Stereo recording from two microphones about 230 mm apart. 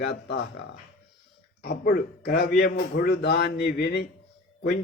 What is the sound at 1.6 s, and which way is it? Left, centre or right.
A man's voice, left.